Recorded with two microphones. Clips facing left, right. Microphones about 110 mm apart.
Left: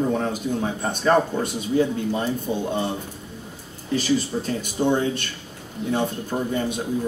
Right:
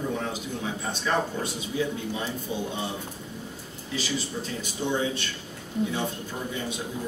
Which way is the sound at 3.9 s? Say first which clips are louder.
Left 9 dB; 50° left (ahead or behind).